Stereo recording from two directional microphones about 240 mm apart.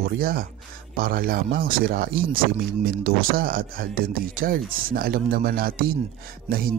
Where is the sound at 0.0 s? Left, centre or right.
Right.